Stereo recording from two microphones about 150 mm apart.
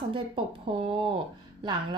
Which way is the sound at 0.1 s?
35° right (ahead or behind).